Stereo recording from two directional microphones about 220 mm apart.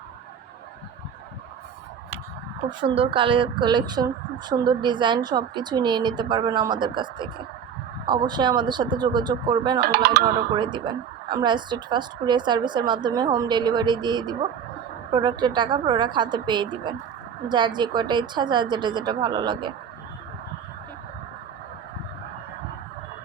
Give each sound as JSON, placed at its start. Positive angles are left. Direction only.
{"t": 2.6, "sound": "speech", "side_deg": -25}
{"t": 9.8, "sound": "speech", "side_deg": -45}
{"t": 10.5, "sound": "speech", "side_deg": -20}